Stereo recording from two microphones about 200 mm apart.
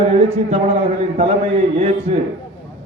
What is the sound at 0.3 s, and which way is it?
A man's voice, 30° right (ahead or behind).